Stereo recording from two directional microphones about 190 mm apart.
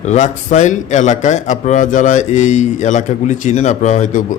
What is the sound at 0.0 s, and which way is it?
A man's voice, 40° left (ahead or behind).